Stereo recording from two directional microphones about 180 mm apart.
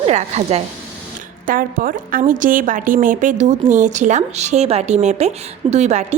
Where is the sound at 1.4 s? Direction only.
50° right (ahead or behind).